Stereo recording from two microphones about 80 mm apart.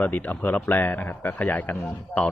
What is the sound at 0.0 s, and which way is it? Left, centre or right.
Speech, centre.